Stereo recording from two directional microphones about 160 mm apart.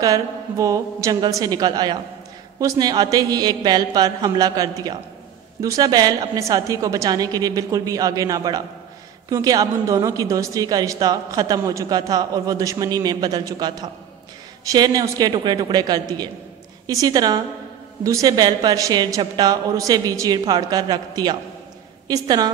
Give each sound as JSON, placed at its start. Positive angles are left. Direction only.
{"t": 0.0, "sound": "a woman's voice", "side_deg": -20}